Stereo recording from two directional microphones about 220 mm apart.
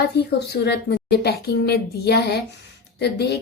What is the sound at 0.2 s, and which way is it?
A woman's voice, 45° left (ahead or behind).